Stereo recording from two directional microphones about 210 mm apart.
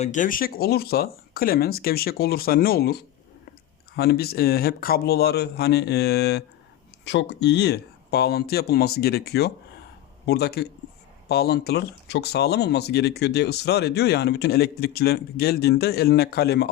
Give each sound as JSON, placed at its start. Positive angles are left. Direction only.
{"t": 0.0, "sound": "speech", "side_deg": 35}